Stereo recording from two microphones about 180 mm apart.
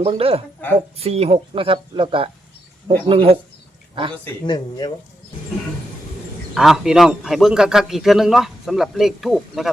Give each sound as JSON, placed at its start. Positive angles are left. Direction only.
{"t": 0.0, "sound": "speech", "side_deg": -30}
{"t": 4.4, "sound": "speech", "side_deg": 25}
{"t": 6.5, "sound": "a man's voice", "side_deg": 0}